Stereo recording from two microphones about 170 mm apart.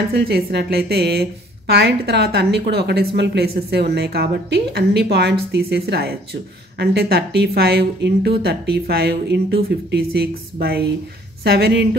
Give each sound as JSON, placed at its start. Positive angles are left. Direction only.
{"t": 0.1, "sound": "a woman's voice", "side_deg": -65}